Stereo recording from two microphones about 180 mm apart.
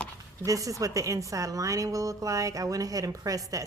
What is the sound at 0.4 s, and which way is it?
A woman's voice, 20° right (ahead or behind).